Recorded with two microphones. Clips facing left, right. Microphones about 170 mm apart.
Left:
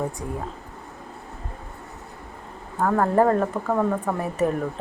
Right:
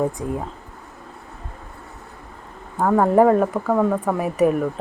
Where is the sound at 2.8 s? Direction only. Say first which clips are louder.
Right 4 dB; 10° right (ahead or behind).